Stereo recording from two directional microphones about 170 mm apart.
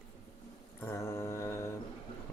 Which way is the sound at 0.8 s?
15° left (ahead or behind).